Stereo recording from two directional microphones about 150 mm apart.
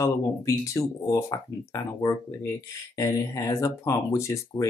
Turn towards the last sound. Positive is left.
turn(degrees=20)  # may be behind; listen again after turning